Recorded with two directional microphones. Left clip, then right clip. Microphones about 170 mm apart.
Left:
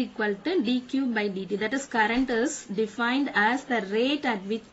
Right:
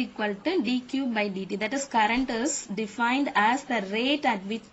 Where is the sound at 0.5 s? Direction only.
25° right (ahead or behind).